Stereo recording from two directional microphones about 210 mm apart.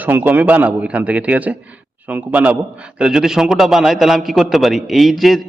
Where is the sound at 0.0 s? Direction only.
10° right (ahead or behind).